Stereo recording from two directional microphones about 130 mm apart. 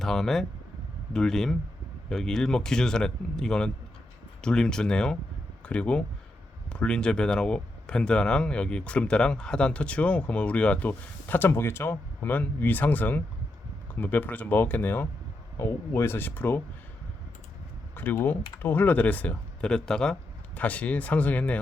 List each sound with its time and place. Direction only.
0.0 s speech: centre (ahead or behind)
17.9 s speech: 15° left (ahead or behind)